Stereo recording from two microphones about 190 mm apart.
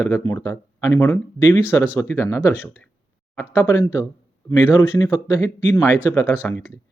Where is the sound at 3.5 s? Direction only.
15° left (ahead or behind).